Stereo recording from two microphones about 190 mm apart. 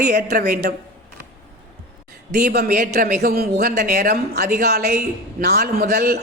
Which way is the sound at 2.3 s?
55° right (ahead or behind).